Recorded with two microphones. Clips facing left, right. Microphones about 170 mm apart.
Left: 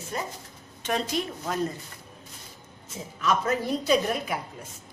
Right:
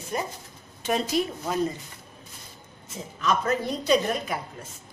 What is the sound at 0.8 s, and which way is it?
Speech, 5° right (ahead or behind).